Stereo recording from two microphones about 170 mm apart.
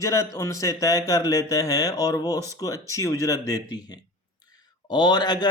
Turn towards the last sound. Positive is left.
turn(degrees=25)  # may be behind; listen again after turning